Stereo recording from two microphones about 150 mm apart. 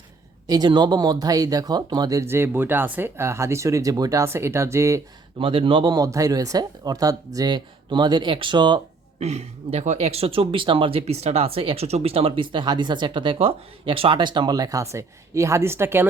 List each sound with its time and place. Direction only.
0.4 s speech: 30° right (ahead or behind)
5.4 s speech: 35° right (ahead or behind)
9.2 s speech: 45° right (ahead or behind); by 16.0 s 15° right (ahead or behind)